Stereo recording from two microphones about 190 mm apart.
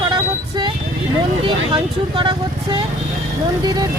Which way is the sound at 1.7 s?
25° right (ahead or behind).